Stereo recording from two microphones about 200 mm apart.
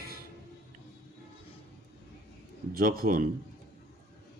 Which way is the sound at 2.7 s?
45° right (ahead or behind).